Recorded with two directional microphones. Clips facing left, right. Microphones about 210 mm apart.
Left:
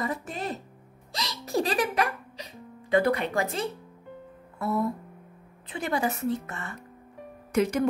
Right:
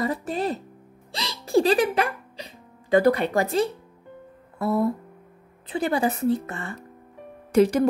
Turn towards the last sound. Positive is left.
turn(degrees=-35)  # may be behind; listen again after turning